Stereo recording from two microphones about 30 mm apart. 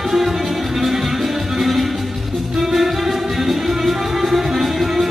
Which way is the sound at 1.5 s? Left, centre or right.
Centre.